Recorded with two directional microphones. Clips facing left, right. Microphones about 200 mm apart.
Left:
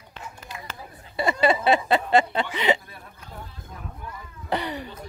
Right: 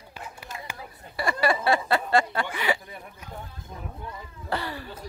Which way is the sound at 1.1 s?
20° left (ahead or behind).